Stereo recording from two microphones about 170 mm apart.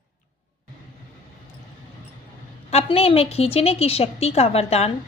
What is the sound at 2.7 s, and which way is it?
A woman's voice, 35° left (ahead or behind).